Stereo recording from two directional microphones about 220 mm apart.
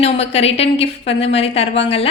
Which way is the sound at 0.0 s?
30° left (ahead or behind).